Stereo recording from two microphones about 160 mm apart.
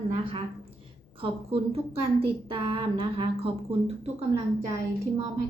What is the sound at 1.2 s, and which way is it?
A woman's voice, 40° right (ahead or behind).